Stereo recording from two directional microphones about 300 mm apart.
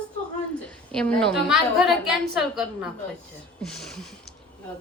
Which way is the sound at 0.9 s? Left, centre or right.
Centre.